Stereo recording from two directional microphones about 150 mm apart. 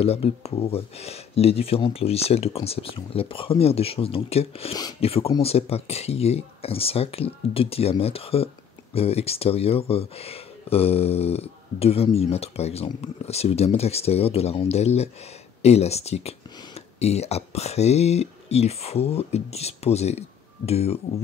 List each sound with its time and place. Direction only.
0.0 s speech: 40° left (ahead or behind)